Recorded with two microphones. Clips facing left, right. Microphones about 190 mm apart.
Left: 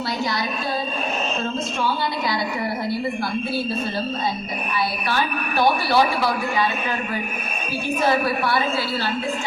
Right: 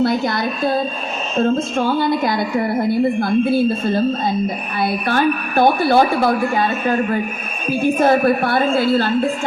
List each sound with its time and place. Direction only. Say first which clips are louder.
0.0 s speech: right 8 dB; 55° right (ahead or behind)